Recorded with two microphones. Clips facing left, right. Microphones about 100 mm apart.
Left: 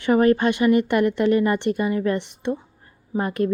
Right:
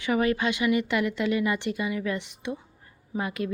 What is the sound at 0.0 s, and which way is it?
A woman's voice, 45° left (ahead or behind).